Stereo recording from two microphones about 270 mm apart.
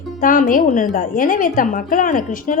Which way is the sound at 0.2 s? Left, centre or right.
Left.